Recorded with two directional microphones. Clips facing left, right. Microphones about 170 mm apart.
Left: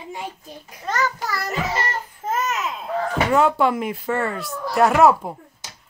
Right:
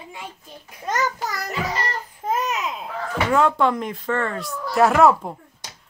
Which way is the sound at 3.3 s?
5° left (ahead or behind).